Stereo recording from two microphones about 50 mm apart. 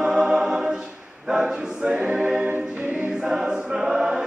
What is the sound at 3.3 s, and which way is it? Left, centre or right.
Choir, centre.